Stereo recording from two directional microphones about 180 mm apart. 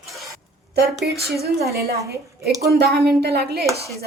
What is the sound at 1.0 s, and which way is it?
Speech, 65° right (ahead or behind).